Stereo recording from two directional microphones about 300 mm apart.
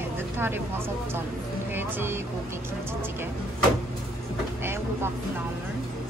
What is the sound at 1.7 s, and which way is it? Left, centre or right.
Vehicle, centre.